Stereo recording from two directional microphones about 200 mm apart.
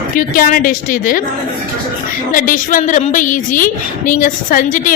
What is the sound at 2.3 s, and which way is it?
A woman's voice, 40° left (ahead or behind).